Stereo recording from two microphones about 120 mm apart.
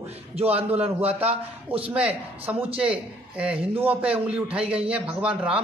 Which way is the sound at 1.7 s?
10° right (ahead or behind).